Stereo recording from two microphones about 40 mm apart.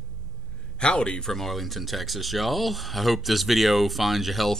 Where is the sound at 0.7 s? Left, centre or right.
Left.